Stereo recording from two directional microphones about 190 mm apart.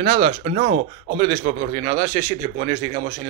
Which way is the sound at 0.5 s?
45° right (ahead or behind).